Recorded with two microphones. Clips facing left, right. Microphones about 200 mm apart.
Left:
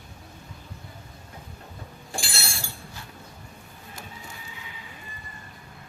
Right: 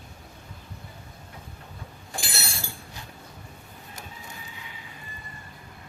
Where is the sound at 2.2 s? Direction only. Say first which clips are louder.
Even; 20° right (ahead or behind).